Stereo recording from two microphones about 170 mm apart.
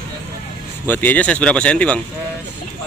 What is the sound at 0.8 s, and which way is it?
Speech, 10° left (ahead or behind).